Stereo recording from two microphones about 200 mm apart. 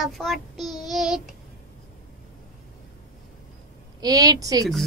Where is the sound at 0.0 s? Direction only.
Centre (ahead or behind).